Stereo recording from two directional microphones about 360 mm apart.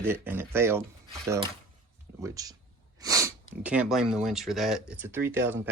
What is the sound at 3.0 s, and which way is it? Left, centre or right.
Sneeze, centre.